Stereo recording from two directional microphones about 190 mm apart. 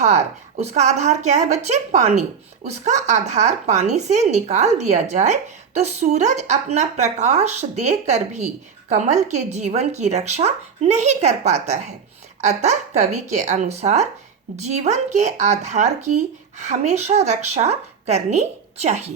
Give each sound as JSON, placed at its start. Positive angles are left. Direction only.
{"t": 0.0, "sound": "speech", "side_deg": -35}